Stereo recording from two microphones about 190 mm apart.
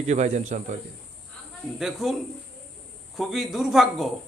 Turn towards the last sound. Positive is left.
turn(degrees=0)  # may be behind; listen again after turning